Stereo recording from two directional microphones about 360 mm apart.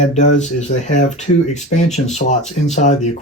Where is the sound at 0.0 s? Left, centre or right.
Centre.